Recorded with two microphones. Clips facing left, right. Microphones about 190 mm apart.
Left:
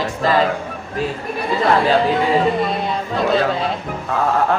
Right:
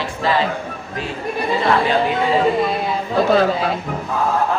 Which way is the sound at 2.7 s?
5° right (ahead or behind).